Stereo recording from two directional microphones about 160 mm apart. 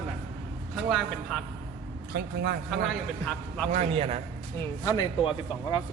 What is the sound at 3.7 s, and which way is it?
Speech, 45° right (ahead or behind).